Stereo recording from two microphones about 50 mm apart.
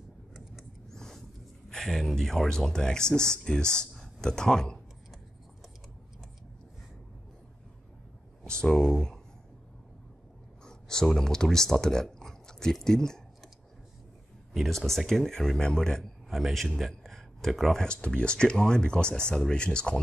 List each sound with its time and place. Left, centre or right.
0.8 s a sound: centre
1.7 s speech: centre
8.5 s speech: centre
10.6 s speech: centre
14.5 s speech: centre
16.3 s a man's voice: centre
17.8 s speech: left